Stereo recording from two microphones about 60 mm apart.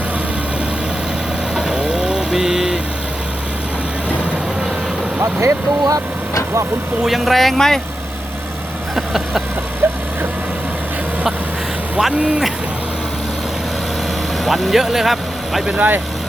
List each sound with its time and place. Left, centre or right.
1.5 s vehicle: centre
5.2 s speech: right
7.0 s speech: centre
9.0 s vehicle: centre
9.8 s vehicle: right
14.4 s speech: centre
15.6 s speech: centre